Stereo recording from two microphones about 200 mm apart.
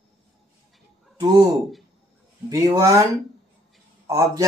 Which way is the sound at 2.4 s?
15° right (ahead or behind).